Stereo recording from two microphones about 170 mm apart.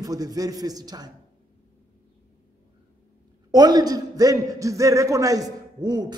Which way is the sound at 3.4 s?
25° right (ahead or behind).